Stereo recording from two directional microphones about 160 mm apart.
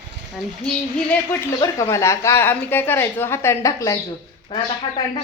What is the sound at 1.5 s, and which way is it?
A woman's voice, 20° left (ahead or behind).